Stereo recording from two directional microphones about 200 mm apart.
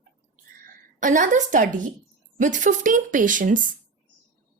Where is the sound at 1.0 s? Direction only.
40° right (ahead or behind).